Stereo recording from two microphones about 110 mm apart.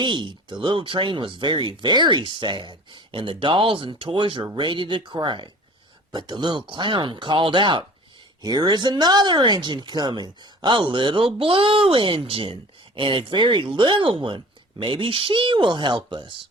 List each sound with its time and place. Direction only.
0.0 s speech: 45° right (ahead or behind)